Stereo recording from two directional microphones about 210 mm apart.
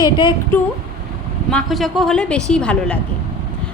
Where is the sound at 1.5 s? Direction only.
Centre (ahead or behind).